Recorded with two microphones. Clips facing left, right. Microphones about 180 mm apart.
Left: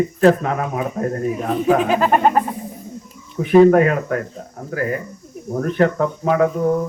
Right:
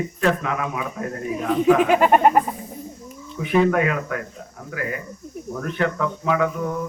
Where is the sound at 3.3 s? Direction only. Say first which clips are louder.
Left 8 dB; 40° left (ahead or behind).